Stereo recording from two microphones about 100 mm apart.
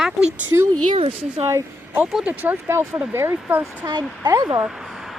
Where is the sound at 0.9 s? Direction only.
65° right (ahead or behind).